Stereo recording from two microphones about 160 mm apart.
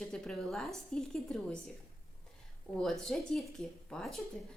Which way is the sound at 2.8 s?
Centre (ahead or behind).